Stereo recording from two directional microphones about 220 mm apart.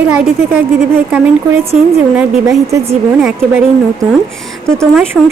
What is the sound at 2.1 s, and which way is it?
A woman's voice, 15° right (ahead or behind).